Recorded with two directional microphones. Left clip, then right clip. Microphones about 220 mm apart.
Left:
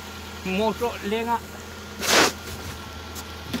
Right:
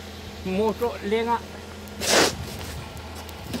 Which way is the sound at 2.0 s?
10° left (ahead or behind).